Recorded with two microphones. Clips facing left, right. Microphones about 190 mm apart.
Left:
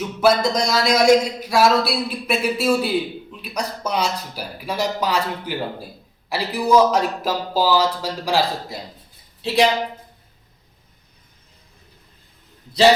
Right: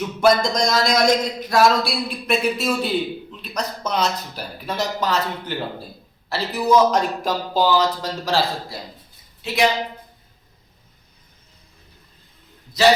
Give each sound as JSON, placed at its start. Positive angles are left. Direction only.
{"t": 0.2, "sound": "speech", "side_deg": 5}
{"t": 9.4, "sound": "a woman's voice", "side_deg": 30}